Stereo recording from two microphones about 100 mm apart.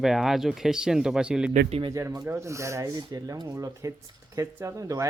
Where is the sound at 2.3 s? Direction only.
30° right (ahead or behind).